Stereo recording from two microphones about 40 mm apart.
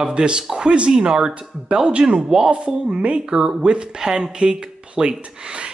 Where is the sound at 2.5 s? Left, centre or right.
Right.